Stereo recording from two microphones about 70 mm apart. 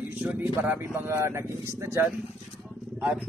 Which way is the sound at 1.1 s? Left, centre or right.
Right.